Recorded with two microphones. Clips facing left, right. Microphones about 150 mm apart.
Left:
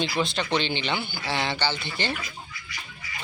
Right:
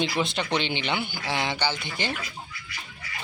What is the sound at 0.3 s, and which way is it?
Speech, 15° right (ahead or behind).